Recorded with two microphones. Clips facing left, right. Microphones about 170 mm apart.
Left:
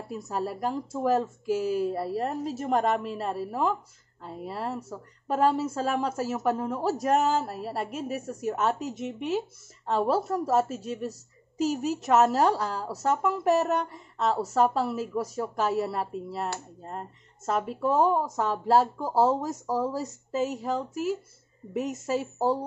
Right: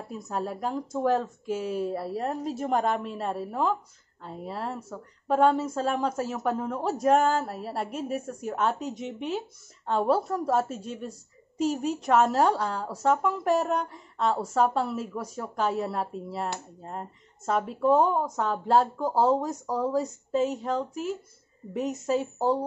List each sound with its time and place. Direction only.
0.1 s a woman's voice: centre (ahead or behind)